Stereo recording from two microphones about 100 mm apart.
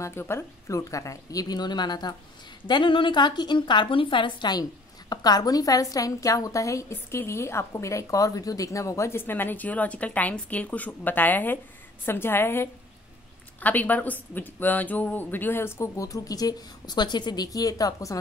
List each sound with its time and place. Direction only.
0.0 s speech: 25° left (ahead or behind); by 2.1 s 45° left (ahead or behind)
2.6 s a woman's voice: 55° left (ahead or behind); by 18.2 s 35° left (ahead or behind)